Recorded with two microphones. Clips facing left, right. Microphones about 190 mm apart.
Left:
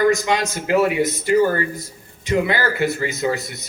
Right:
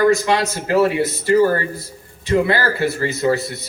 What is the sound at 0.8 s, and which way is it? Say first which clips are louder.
A man's voice: right 3 dB; 20° left (ahead or behind).